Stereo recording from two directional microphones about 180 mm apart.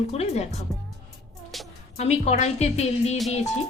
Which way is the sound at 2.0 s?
35° left (ahead or behind).